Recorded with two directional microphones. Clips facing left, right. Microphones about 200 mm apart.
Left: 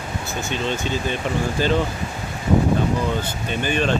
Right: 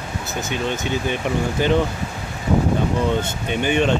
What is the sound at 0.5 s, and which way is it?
Speech, 15° right (ahead or behind).